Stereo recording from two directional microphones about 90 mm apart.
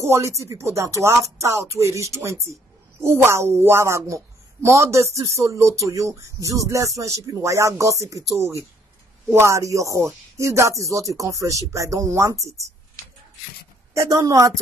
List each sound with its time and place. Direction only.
0.0 s a woman's voice: 30° right (ahead or behind)
13.9 s a woman's voice: 35° right (ahead or behind)